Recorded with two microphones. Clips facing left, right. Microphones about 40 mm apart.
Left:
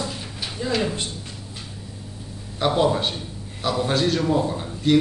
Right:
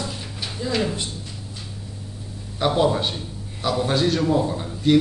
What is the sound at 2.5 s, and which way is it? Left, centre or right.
A man's voice, centre.